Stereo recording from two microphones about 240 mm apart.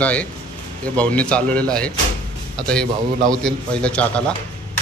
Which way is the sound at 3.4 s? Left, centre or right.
Centre.